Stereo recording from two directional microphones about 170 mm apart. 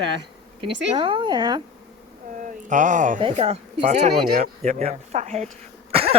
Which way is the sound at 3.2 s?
35° right (ahead or behind).